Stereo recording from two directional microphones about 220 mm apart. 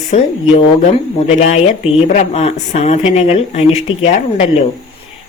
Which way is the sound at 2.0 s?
30° left (ahead or behind).